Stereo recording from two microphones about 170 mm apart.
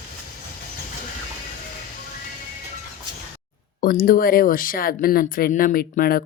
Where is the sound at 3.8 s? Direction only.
55° left (ahead or behind).